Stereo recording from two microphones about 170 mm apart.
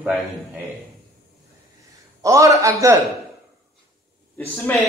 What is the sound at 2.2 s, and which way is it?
Speech, 20° right (ahead or behind).